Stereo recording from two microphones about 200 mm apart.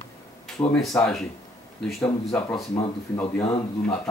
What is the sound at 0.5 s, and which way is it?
Speech, centre (ahead or behind).